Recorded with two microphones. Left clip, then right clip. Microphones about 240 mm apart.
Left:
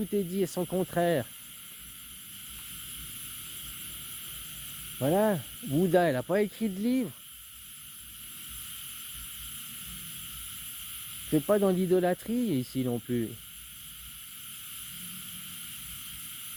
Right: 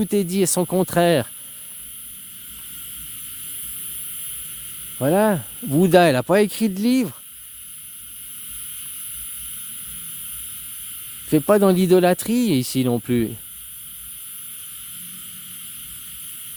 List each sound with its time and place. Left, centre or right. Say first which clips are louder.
0.0 s speech: right 9 dB; right
4.9 s speech: right 8 dB; right
11.3 s speech: right 10 dB; right